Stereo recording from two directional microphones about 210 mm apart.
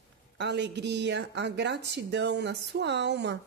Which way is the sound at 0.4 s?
55° right (ahead or behind).